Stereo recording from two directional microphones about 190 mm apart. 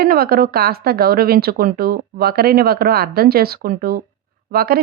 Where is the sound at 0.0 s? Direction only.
50° right (ahead or behind).